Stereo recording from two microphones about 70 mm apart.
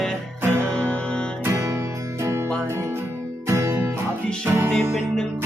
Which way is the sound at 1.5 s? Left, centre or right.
Right.